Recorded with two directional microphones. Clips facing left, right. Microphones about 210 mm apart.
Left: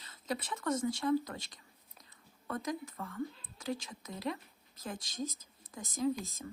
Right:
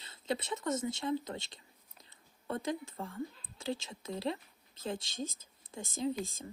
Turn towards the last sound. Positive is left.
turn(degrees=-25)  # may be behind; listen again after turning